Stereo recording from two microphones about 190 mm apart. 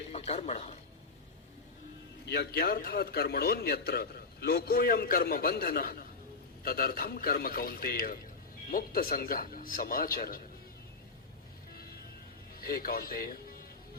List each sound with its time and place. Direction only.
0.1 s a man's voice: 35° left (ahead or behind)
2.3 s a man's voice: 55° left (ahead or behind)
12.5 s a man's voice: 50° left (ahead or behind)